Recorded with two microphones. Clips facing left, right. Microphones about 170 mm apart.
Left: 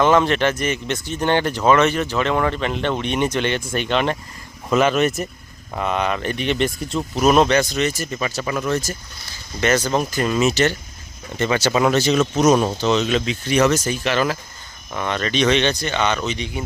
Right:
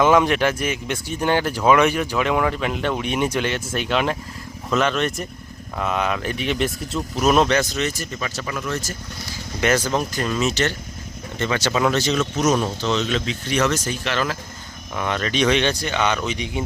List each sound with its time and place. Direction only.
0.0 s speech: 10° right (ahead or behind)
8.2 s speech: 15° left (ahead or behind)
9.6 s speech: 10° right (ahead or behind)
9.9 s speech: 10° left (ahead or behind)
12.1 s speech: 20° left (ahead or behind)
14.9 s speech: 5° right (ahead or behind)